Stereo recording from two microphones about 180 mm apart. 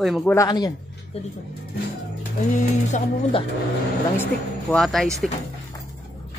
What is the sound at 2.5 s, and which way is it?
Music, 40° left (ahead or behind).